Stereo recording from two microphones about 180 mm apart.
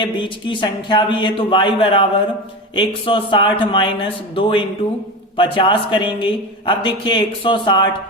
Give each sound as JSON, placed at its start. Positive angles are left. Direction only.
{"t": 0.0, "sound": "a man's voice", "side_deg": 25}